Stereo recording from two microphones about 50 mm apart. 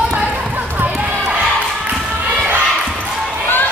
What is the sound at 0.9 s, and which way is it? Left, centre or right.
Basketball bounce, right.